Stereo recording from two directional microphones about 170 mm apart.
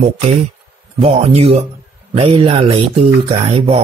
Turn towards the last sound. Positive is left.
turn(degrees=-35)  # may be behind; listen again after turning